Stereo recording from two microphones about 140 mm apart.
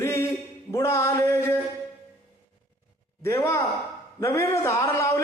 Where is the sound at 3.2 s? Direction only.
20° left (ahead or behind).